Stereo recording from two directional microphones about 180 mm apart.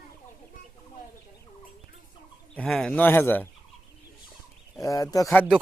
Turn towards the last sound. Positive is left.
turn(degrees=10)  # may be behind; listen again after turning